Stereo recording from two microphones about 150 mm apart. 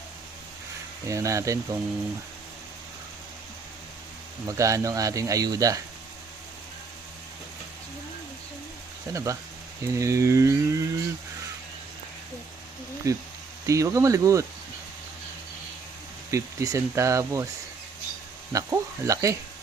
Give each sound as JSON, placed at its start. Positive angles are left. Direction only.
{"t": 1.0, "sound": "a man's voice", "side_deg": -20}
{"t": 4.4, "sound": "a man's voice", "side_deg": -20}
{"t": 9.1, "sound": "a man's voice", "side_deg": -20}
{"t": 13.0, "sound": "a man's voice", "side_deg": -20}
{"t": 16.3, "sound": "a man's voice", "side_deg": -20}
{"t": 18.5, "sound": "a man's voice", "side_deg": -20}